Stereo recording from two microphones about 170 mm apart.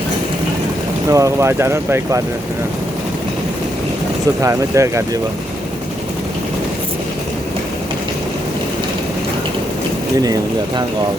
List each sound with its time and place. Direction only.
1.1 s speech: 15° right (ahead or behind)
4.4 s speech: 15° right (ahead or behind)